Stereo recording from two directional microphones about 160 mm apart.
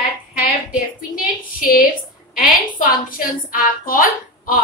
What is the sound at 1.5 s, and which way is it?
A woman's voice, 60° left (ahead or behind).